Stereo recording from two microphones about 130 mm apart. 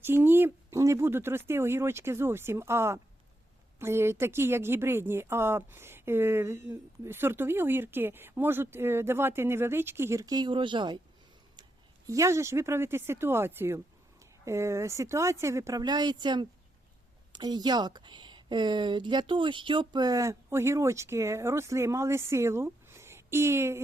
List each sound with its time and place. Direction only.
0.0 s a woman's voice: 15° right (ahead or behind); by 11.0 s 35° right (ahead or behind)
12.0 s a woman's voice: 25° right (ahead or behind)